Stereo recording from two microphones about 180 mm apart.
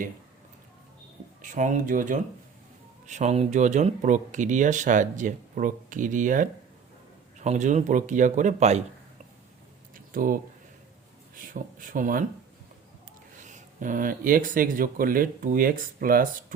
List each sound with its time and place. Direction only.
1.4 s speech: 45° right (ahead or behind)
9.9 s a sound: 50° right (ahead or behind)
11.3 s speech: 50° right (ahead or behind)
13.4 s speech: 45° right (ahead or behind)